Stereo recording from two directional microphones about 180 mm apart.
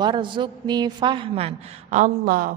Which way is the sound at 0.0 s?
25° right (ahead or behind).